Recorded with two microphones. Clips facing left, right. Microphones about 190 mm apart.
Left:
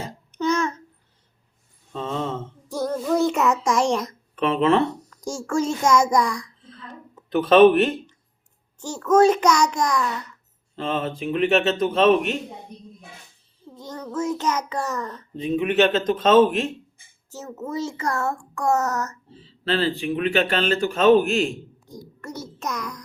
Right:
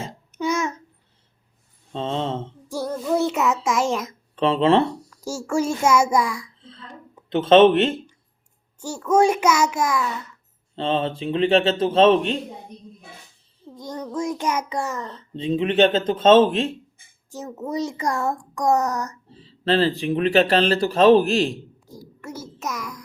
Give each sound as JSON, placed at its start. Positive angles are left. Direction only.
{"t": 0.3, "sound": "burping", "side_deg": -10}
{"t": 1.9, "sound": "a sound", "side_deg": -30}
{"t": 2.6, "sound": "child singing", "side_deg": -10}
{"t": 4.4, "sound": "speech", "side_deg": -30}
{"t": 4.9, "sound": "a child's voice", "side_deg": -10}
{"t": 7.3, "sound": "speech", "side_deg": -25}
{"t": 8.8, "sound": "a child's voice", "side_deg": -10}
{"t": 10.8, "sound": "speech", "side_deg": -30}
{"t": 14.0, "sound": "a child's voice", "side_deg": -15}
{"t": 15.0, "sound": "speech", "side_deg": -30}
{"t": 17.3, "sound": "a child's voice", "side_deg": -15}
{"t": 19.3, "sound": "speech", "side_deg": -40}
{"t": 21.8, "sound": "a sound", "side_deg": -5}